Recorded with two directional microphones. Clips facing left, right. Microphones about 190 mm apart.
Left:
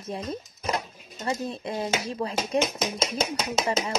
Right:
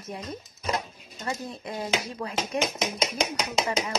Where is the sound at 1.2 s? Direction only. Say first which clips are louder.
Left 4 dB; 25° left (ahead or behind).